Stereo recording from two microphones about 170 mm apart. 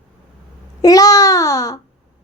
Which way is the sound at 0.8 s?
20° left (ahead or behind).